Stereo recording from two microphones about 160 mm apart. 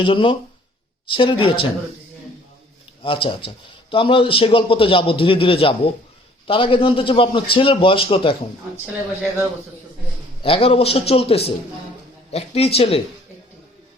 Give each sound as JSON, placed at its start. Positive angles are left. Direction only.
{"t": 0.0, "sound": "speech", "side_deg": 30}
{"t": 3.0, "sound": "speech", "side_deg": 35}
{"t": 10.4, "sound": "speech", "side_deg": 35}